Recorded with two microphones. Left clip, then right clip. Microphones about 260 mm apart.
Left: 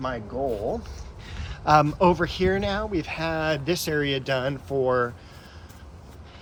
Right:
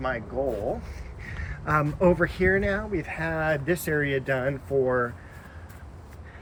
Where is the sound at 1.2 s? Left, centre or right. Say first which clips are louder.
Left 7 dB; centre.